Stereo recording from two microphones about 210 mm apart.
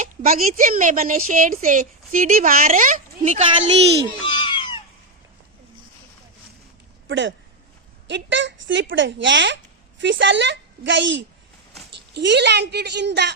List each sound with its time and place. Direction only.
0.0 s a woman's voice: 40° right (ahead or behind)
4.2 s cat: 20° left (ahead or behind)
7.1 s a woman's voice: 60° right (ahead or behind)